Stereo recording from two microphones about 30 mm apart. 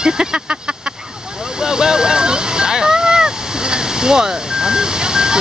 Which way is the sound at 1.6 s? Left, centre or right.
Right.